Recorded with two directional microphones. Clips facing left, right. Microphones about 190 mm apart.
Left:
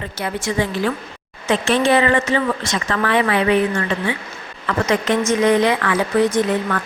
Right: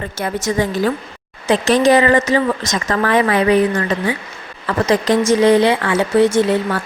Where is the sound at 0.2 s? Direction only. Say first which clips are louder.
Right 3 dB; 40° right (ahead or behind).